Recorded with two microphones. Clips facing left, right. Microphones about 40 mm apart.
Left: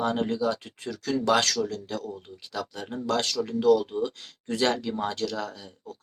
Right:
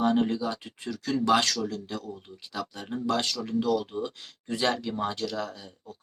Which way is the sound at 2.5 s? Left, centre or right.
Centre.